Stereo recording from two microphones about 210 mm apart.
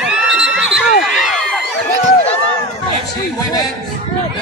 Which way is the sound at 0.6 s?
Centre (ahead or behind).